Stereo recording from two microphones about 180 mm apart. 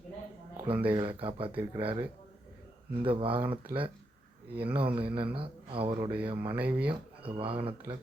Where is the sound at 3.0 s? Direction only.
30° right (ahead or behind).